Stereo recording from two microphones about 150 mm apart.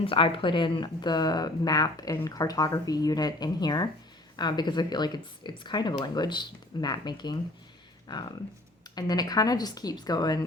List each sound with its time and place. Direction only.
0.0 s speech: 35° left (ahead or behind)